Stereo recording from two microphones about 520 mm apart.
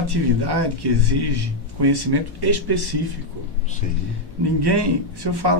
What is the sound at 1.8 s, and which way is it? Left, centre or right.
A man's voice, right.